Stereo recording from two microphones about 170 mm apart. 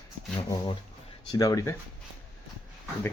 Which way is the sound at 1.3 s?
20° left (ahead or behind).